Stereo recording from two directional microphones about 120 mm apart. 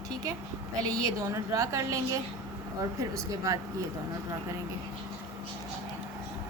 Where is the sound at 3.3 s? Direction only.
25° right (ahead or behind).